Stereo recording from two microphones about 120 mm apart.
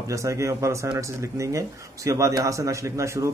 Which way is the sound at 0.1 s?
25° right (ahead or behind).